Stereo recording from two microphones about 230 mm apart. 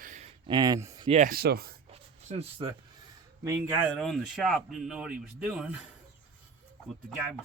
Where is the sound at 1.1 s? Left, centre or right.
Right.